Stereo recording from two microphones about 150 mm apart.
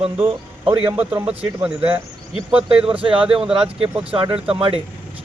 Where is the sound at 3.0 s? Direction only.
35° right (ahead or behind).